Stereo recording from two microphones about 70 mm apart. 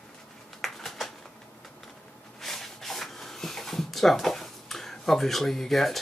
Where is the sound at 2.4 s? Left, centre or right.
Centre.